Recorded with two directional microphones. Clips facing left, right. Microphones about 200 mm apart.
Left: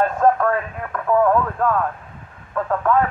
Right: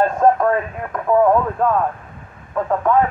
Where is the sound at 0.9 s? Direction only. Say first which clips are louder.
Right 2 dB; 15° right (ahead or behind).